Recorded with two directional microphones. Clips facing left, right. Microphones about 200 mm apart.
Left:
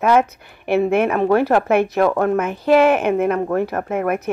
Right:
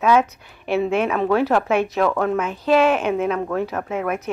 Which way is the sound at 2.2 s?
55° left (ahead or behind).